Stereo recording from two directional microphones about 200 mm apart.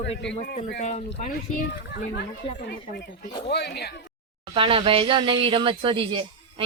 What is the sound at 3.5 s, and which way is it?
Speech, 55° left (ahead or behind).